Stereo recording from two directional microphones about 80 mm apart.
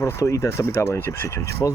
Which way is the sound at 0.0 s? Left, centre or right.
Left.